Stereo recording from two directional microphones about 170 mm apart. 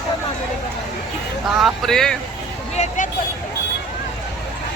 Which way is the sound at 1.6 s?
Centre (ahead or behind).